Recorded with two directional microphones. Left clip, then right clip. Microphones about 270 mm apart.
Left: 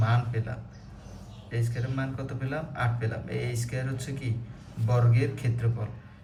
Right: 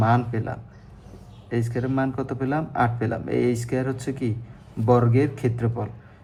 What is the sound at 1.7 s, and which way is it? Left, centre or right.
A man's voice, centre.